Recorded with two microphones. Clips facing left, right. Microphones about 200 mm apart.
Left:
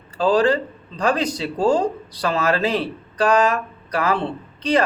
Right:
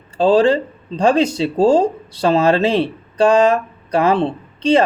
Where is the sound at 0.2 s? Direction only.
25° right (ahead or behind).